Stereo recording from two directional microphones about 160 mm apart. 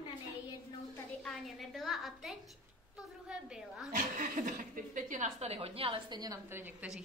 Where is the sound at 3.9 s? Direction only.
55° right (ahead or behind); by 7.0 s 10° right (ahead or behind).